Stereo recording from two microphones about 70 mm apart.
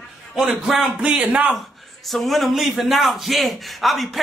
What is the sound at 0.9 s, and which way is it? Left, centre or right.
Speech, centre.